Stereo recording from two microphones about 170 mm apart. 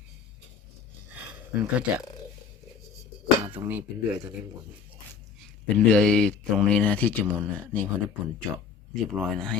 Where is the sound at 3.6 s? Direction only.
25° right (ahead or behind).